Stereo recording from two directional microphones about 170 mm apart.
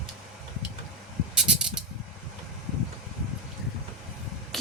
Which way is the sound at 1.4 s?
5° right (ahead or behind).